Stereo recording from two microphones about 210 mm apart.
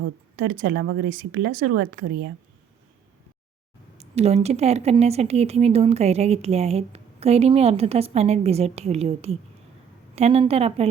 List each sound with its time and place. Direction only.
0.3 s speech: 45° right (ahead or behind)
3.9 s speech: 30° right (ahead or behind)